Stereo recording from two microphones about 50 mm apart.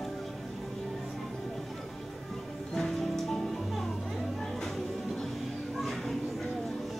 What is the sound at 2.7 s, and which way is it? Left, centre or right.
Music, centre.